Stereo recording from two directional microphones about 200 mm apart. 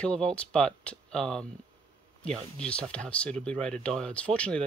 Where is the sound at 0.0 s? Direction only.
5° left (ahead or behind).